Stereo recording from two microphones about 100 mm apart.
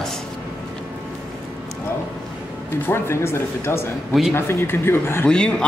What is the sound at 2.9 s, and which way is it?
Speech, 25° left (ahead or behind).